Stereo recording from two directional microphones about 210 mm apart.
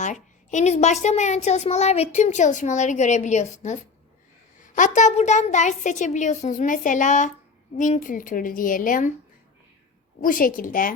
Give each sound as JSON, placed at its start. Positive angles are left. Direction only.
{"t": 0.0, "sound": "a child's voice", "side_deg": 35}
{"t": 10.2, "sound": "a child's voice", "side_deg": 40}